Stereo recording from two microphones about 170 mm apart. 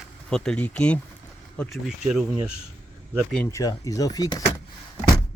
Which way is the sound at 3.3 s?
10° left (ahead or behind).